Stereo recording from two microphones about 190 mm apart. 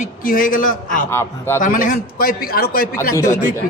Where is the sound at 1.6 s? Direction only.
45° left (ahead or behind).